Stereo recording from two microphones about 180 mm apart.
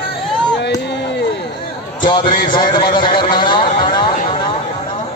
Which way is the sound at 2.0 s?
25° left (ahead or behind).